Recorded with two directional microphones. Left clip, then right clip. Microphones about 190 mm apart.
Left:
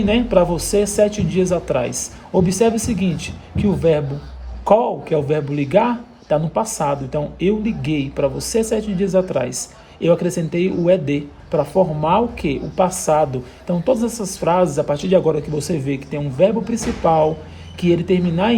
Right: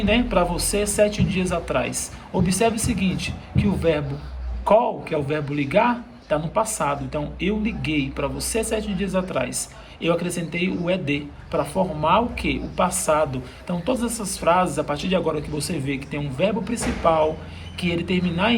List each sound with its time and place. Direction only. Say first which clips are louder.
0.0 s a man's voice: left 5 dB; 45° left (ahead or behind)